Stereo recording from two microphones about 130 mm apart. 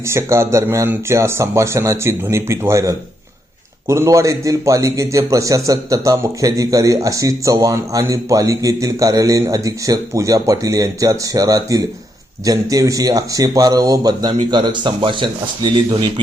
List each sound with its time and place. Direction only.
0.0 s a man's voice: 20° right (ahead or behind); by 16.2 s 35° right (ahead or behind)